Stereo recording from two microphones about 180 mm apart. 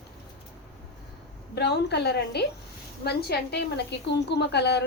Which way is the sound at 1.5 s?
70° left (ahead or behind).